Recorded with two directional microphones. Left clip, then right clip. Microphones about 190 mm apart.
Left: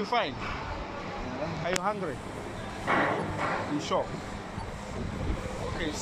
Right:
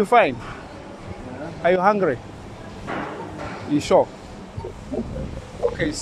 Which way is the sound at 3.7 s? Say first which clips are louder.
Right 18 dB; 60° right (ahead or behind).